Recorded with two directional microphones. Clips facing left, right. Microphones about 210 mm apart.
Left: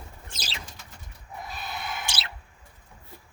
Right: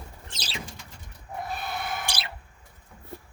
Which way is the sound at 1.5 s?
55° right (ahead or behind).